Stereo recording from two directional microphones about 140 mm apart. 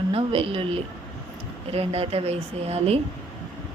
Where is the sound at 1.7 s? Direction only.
45° right (ahead or behind).